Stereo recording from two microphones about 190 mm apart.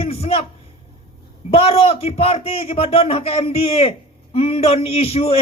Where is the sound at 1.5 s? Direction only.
30° left (ahead or behind).